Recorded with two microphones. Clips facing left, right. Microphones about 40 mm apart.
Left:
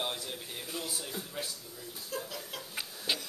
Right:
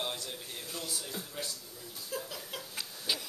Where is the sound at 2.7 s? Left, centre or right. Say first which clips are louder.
Left 2 dB; centre.